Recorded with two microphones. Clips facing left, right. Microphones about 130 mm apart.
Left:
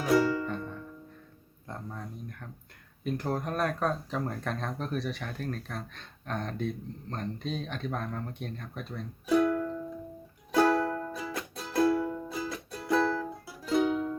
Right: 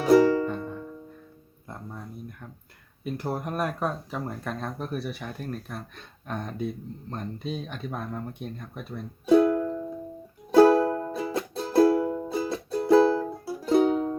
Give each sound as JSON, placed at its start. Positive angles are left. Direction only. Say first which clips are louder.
{"t": 0.0, "sound": "music", "louder": "right 7 dB", "side_deg": -40}
{"t": 0.5, "sound": "music", "louder": "right 3 dB", "side_deg": -30}
{"t": 1.6, "sound": "music", "louder": "even", "side_deg": -10}
{"t": 3.0, "sound": "speech", "louder": "right 1 dB", "side_deg": -5}
{"t": 9.2, "sound": "music", "louder": "right 6 dB", "side_deg": -30}